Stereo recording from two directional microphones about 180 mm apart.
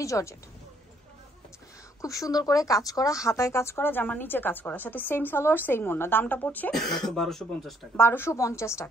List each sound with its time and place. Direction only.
0.0 s speech: 15° left (ahead or behind)
2.0 s speech: 20° left (ahead or behind)